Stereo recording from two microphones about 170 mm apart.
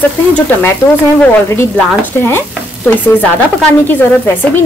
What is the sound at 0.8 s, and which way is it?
Speech, 25° left (ahead or behind).